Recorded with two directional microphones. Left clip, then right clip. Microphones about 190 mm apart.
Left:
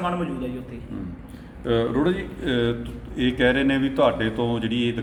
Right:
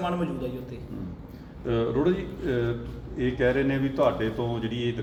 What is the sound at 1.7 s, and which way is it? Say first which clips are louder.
Speech: left 3 dB; 50° left (ahead or behind).